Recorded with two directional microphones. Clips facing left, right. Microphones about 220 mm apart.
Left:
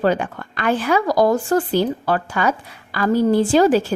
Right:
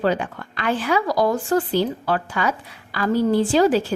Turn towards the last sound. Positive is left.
turn(degrees=50)  # may be behind; listen again after turning